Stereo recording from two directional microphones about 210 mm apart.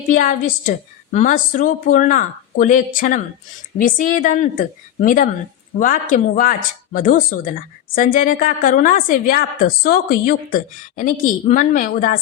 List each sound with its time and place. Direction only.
0.1 s a woman's voice: 40° left (ahead or behind)